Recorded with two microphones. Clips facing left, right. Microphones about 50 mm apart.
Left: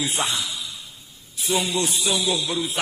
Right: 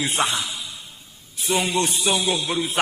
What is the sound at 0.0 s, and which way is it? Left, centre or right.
A man's voice, right.